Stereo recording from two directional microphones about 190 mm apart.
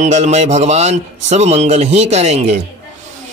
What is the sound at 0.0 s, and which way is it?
Speech, 35° right (ahead or behind).